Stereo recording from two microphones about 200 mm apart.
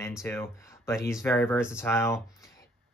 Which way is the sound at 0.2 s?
15° left (ahead or behind).